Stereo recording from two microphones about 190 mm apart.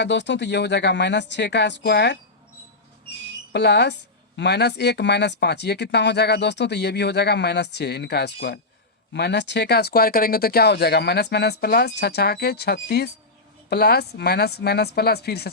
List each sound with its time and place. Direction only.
0.0 s speech: 70° left (ahead or behind)
3.5 s speech: 60° left (ahead or behind)